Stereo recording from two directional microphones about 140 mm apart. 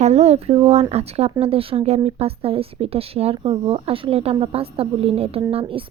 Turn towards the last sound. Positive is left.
turn(degrees=-40)  # may be behind; listen again after turning